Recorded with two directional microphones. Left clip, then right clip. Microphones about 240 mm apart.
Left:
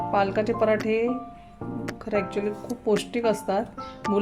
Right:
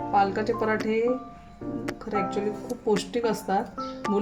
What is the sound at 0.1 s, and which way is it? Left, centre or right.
Speech, centre.